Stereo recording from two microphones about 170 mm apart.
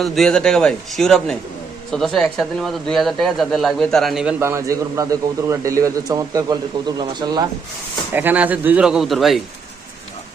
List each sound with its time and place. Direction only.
0.0 s a man's voice: 5° left (ahead or behind)
4.4 s a man's voice: 15° right (ahead or behind)
8.1 s speech: 10° right (ahead or behind)